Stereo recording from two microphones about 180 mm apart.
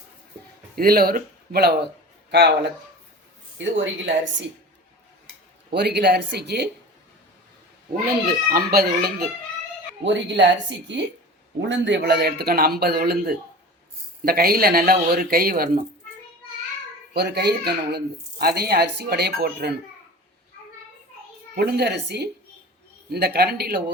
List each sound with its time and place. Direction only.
0.8 s speech: 55° right (ahead or behind)
3.6 s speech: 90° right
5.7 s speech: 65° right (ahead or behind)
8.3 s speech: 55° right (ahead or behind)
10.0 s speech: 85° right
11.7 s speech: 70° right (ahead or behind); by 15.8 s 55° right (ahead or behind)
17.2 s speech: 65° right (ahead or behind)
21.5 s speech: 65° right (ahead or behind)